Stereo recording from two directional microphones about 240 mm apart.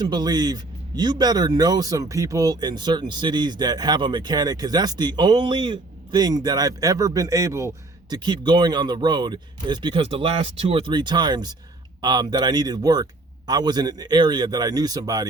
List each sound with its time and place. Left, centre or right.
0.0 s a man's voice: centre